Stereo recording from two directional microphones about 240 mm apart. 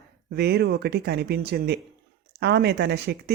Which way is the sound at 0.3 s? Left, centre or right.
Right.